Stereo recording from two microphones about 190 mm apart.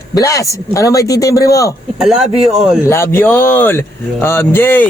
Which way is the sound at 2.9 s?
15° left (ahead or behind).